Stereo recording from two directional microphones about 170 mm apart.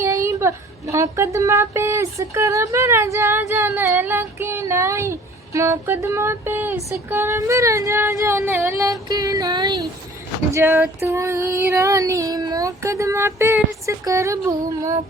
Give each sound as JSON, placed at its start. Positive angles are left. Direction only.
{"t": 0.0, "sound": "speech", "side_deg": -15}